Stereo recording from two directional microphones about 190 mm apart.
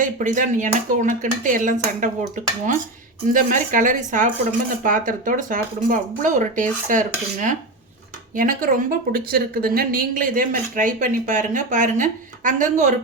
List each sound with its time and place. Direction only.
0.0 s speech: 45° right (ahead or behind)
3.3 s speech: 45° right (ahead or behind)